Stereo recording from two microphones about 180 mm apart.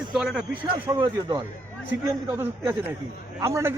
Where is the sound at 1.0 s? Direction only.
20° right (ahead or behind).